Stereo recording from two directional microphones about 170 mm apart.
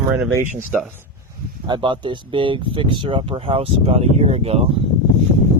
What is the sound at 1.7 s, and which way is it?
Speech, 30° right (ahead or behind).